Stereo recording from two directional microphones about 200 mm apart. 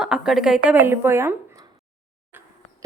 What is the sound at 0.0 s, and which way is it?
Speech, centre (ahead or behind).